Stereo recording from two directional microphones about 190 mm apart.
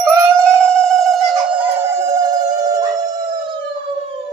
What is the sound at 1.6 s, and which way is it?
Howl, 15° right (ahead or behind).